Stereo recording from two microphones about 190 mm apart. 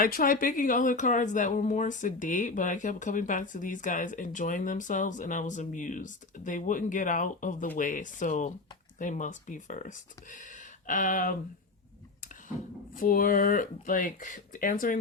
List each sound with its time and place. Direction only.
0.0 s speech: 45° left (ahead or behind)
13.0 s speech: 45° left (ahead or behind)